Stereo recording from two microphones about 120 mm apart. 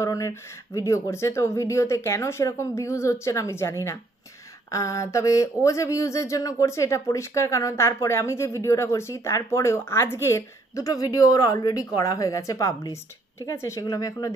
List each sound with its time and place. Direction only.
0.0 s speech: 25° left (ahead or behind)